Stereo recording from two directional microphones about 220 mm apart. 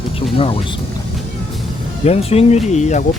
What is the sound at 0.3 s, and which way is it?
Speech, 25° left (ahead or behind).